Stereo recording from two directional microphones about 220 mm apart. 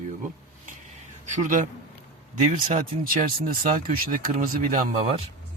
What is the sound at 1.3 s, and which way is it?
Speech, 35° right (ahead or behind).